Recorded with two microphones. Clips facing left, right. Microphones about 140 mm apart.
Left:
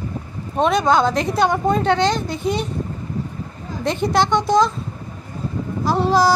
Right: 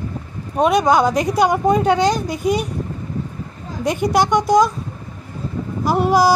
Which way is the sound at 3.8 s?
10° right (ahead or behind).